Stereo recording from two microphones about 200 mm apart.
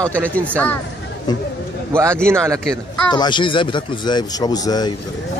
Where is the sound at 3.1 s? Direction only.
20° left (ahead or behind).